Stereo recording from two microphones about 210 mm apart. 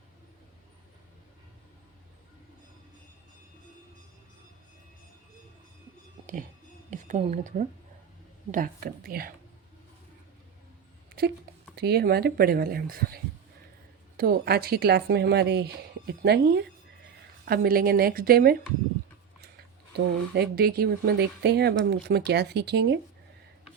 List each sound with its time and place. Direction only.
6.9 s speech: 35° right (ahead or behind)
11.2 s speech: 45° right (ahead or behind)
20.3 s speech: 50° right (ahead or behind)